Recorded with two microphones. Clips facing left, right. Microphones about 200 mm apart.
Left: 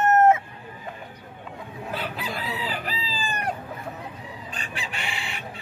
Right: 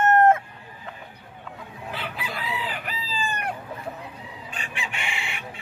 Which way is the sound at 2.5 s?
35° left (ahead or behind).